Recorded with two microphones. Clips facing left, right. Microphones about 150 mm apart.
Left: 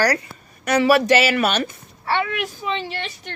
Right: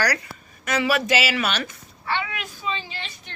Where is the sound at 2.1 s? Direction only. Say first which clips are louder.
Left 7 dB; 60° left (ahead or behind).